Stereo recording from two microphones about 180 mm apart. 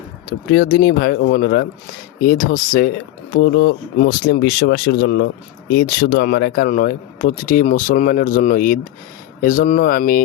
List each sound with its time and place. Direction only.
0.3 s speech: 55° left (ahead or behind)
3.3 s speech: 65° left (ahead or behind)